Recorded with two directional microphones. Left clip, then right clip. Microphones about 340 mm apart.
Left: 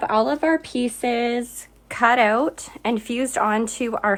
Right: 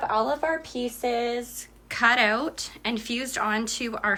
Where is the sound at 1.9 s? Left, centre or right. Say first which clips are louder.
Left 4 dB; centre.